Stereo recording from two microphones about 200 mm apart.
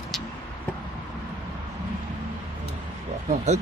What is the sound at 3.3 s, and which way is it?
Speech, 35° right (ahead or behind).